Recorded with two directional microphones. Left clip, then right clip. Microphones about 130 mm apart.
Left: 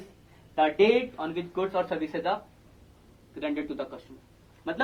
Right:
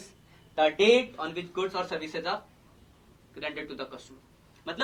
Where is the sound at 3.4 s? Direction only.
60° left (ahead or behind).